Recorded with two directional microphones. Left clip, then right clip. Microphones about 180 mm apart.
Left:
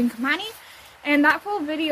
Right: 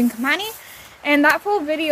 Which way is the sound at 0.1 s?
30° right (ahead or behind).